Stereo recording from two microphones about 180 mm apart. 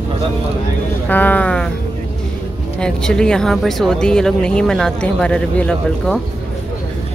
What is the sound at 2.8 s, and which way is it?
Speech, 5° left (ahead or behind).